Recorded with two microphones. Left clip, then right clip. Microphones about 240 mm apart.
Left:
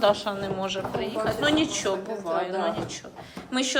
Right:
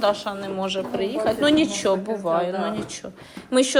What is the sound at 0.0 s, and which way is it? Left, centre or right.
A woman's voice, centre.